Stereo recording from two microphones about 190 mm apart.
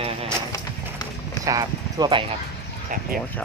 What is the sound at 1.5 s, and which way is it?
Speech, 20° right (ahead or behind).